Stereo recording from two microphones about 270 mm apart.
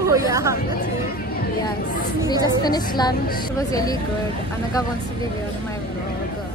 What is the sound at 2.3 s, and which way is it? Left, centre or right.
A woman's voice, centre.